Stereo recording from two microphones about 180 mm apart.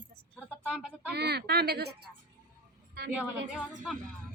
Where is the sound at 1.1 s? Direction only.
65° right (ahead or behind).